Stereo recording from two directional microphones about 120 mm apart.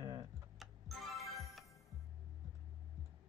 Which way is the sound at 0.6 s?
Centre (ahead or behind).